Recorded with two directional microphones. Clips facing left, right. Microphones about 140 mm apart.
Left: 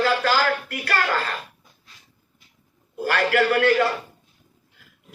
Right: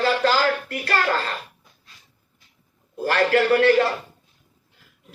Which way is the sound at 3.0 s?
30° right (ahead or behind).